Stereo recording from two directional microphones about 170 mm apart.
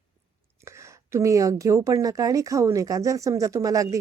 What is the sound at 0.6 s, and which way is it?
A woman's voice, 15° right (ahead or behind).